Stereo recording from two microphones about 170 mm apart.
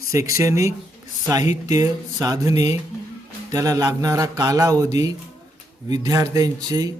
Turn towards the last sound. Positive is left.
turn(degrees=-25)  # may be behind; listen again after turning